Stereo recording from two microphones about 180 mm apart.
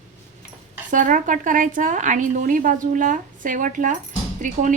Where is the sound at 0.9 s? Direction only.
45° right (ahead or behind).